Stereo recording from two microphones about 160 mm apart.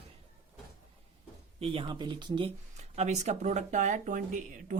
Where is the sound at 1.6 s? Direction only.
35° right (ahead or behind).